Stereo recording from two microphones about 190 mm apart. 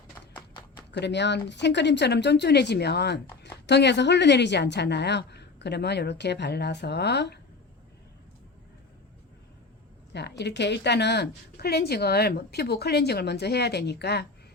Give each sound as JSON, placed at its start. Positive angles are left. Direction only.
{"t": 0.9, "sound": "a woman's voice", "side_deg": 65}
{"t": 10.1, "sound": "a woman's voice", "side_deg": 65}